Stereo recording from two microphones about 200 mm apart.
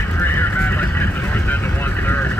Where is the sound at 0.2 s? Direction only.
10° left (ahead or behind).